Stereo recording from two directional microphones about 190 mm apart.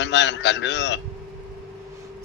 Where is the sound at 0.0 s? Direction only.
70° left (ahead or behind).